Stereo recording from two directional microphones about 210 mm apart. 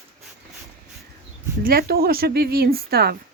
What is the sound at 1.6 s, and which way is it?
Speech, 45° right (ahead or behind).